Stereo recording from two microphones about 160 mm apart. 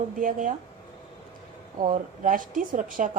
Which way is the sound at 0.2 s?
55° right (ahead or behind).